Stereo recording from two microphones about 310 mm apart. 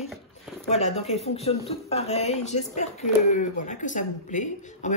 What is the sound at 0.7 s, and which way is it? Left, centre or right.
Speech, left.